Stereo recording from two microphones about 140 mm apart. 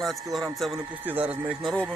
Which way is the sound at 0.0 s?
Centre (ahead or behind).